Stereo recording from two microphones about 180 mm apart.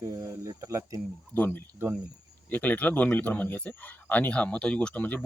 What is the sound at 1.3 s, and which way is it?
Speech, 10° left (ahead or behind).